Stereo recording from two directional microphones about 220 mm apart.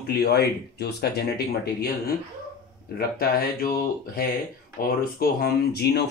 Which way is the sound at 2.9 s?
40° left (ahead or behind).